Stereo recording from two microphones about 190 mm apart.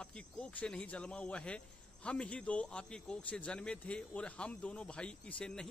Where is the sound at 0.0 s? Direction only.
5° left (ahead or behind).